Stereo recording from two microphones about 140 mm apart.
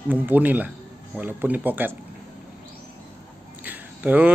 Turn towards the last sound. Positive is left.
turn(degrees=-10)  # may be behind; listen again after turning